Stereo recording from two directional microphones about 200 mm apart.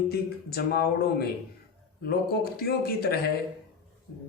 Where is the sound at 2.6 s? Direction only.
50° left (ahead or behind).